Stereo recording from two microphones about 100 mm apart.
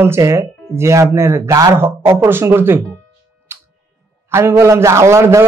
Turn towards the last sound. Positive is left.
turn(degrees=-30)  # may be behind; listen again after turning